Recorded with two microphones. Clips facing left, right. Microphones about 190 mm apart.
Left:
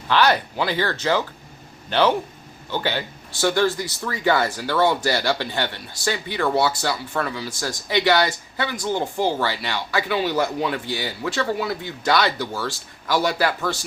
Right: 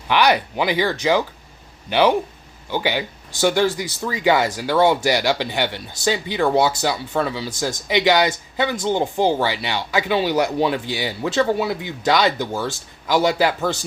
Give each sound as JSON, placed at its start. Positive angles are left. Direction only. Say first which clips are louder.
{"t": 0.1, "sound": "speech", "louder": "right 2 dB", "side_deg": -15}